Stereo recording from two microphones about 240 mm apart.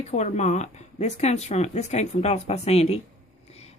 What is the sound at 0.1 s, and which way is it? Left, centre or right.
Speech, left.